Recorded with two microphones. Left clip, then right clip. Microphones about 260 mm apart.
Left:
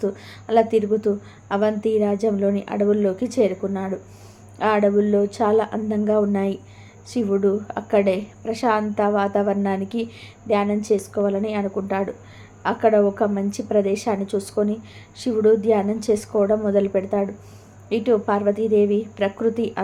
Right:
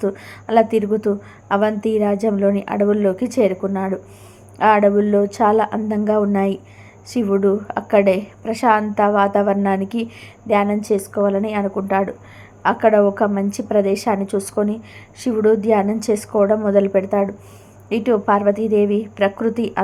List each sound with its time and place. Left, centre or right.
0.0 s a woman's voice: centre